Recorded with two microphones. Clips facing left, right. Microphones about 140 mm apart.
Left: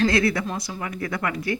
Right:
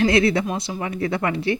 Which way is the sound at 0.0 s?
25° right (ahead or behind).